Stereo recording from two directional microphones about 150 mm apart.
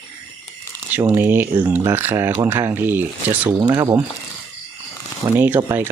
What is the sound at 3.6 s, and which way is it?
Speech, 25° right (ahead or behind).